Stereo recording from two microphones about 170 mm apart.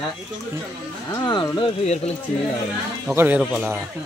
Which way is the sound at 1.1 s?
25° left (ahead or behind).